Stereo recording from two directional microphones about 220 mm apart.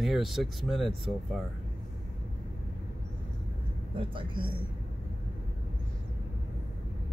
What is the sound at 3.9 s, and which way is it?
Speech, 25° right (ahead or behind).